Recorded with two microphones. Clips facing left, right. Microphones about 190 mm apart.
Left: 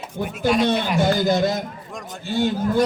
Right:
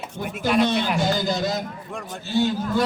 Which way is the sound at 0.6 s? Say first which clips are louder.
Left 3 dB; 55° left (ahead or behind).